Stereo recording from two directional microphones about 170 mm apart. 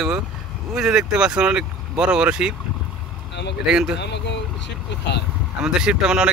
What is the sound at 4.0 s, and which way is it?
Speech, 90° left.